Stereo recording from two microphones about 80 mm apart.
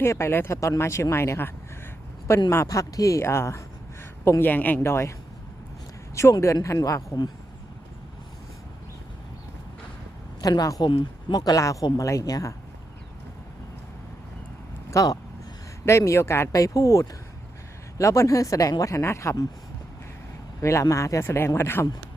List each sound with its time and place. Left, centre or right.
0.0 s a man's voice: left
6.4 s speech: left
10.4 s speech: left
10.8 s speech: left
11.3 s speech: left
14.8 s speech: left
16.5 s speech: left
20.6 s a man's voice: left
21.2 s speech: left